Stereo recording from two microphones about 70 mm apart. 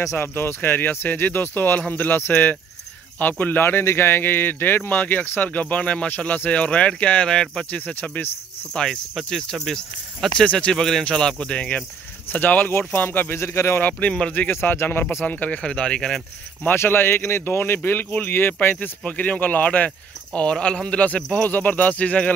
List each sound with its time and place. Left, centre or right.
0.0 s a man's voice: left; by 7.8 s centre
7.8 s a man's voice: left
8.7 s a man's voice: centre; by 13.8 s left
13.8 s speech: centre
14.3 s speech: left
15.2 s speech: left
16.6 s a man's voice: left